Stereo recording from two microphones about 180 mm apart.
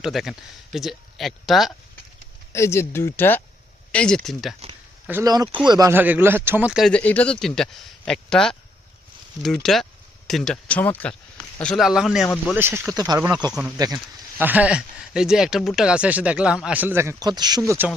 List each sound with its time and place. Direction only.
0.0 s speech: centre (ahead or behind)
2.5 s speech: 15° left (ahead or behind)
5.0 s speech: 10° right (ahead or behind)
5.3 s speech: 20° right (ahead or behind); by 12.5 s centre (ahead or behind)
12.5 s speech: 10° right (ahead or behind)
13.5 s speech: 5° right (ahead or behind)
13.7 s speech: 20° right (ahead or behind)